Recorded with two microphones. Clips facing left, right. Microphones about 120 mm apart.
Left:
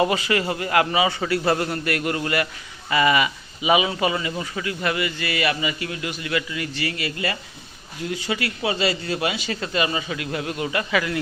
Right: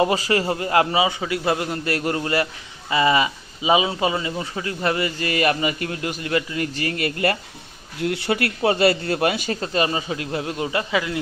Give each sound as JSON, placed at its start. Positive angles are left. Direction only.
{"t": 0.0, "sound": "a man's voice", "side_deg": -30}
{"t": 1.0, "sound": "a man's voice", "side_deg": -15}
{"t": 1.8, "sound": "a man's voice", "side_deg": -30}
{"t": 8.0, "sound": "a man's voice", "side_deg": -65}